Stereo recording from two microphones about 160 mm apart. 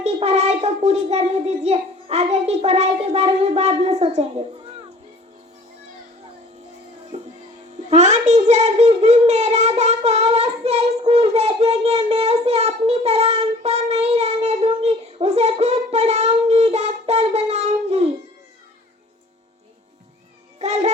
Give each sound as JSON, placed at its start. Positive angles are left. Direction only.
{"t": 0.0, "sound": "a child's voice", "side_deg": -40}
{"t": 7.1, "sound": "music", "side_deg": -40}
{"t": 7.9, "sound": "a sound", "side_deg": -45}
{"t": 20.6, "sound": "a child's voice", "side_deg": -45}